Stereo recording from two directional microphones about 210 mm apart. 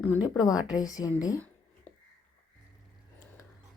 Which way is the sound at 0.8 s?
15° left (ahead or behind).